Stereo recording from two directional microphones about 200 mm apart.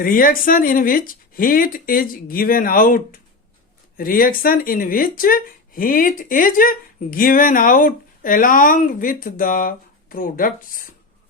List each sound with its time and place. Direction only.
0.0 s speech: 45° left (ahead or behind)